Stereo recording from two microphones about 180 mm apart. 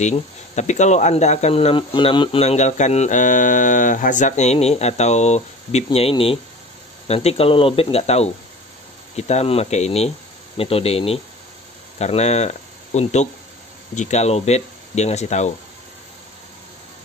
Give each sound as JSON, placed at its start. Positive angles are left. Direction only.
{"t": 0.0, "sound": "speech", "side_deg": 40}